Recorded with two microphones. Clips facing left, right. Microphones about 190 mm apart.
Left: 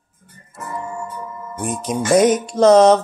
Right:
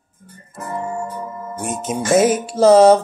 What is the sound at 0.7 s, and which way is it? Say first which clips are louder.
Music: right 4 dB; 35° right (ahead or behind).